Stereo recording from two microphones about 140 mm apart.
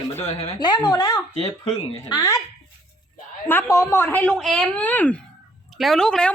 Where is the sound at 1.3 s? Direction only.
45° left (ahead or behind).